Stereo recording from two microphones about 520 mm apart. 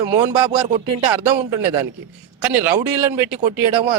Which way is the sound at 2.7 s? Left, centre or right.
Right.